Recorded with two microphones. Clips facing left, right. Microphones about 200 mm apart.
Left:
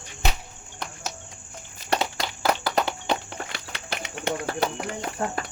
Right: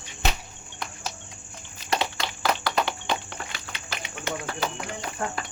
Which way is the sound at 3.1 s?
55° left (ahead or behind).